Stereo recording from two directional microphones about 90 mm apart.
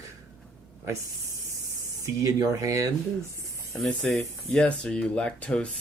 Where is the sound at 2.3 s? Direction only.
40° right (ahead or behind).